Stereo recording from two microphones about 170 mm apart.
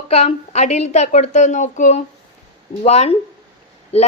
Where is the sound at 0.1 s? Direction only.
40° left (ahead or behind).